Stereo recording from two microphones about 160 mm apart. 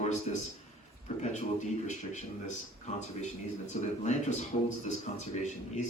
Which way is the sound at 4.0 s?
45° left (ahead or behind).